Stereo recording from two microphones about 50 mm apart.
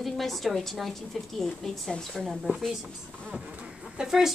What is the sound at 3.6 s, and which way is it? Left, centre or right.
Bird, centre.